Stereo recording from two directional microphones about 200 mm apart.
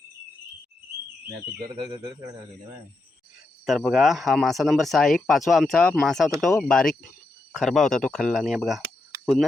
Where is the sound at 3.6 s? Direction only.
Centre (ahead or behind).